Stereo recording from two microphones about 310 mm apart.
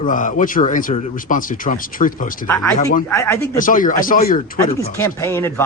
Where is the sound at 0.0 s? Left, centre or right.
Left.